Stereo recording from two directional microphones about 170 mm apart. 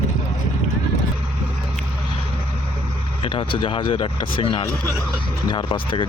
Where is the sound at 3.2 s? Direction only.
30° left (ahead or behind).